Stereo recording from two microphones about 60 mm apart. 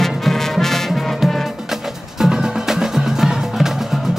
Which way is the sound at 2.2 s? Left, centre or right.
Centre.